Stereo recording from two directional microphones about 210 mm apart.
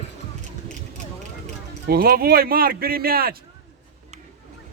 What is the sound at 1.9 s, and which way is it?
Speech, 45° right (ahead or behind).